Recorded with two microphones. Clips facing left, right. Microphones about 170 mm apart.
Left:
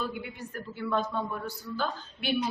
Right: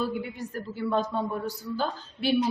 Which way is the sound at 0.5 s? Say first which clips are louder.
Right 3 dB; 35° right (ahead or behind).